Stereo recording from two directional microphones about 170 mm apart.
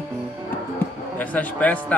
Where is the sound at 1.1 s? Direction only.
10° left (ahead or behind).